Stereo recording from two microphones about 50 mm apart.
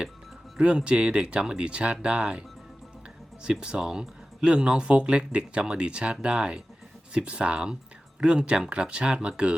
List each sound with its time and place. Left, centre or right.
0.9 s speech: right
3.4 s speech: centre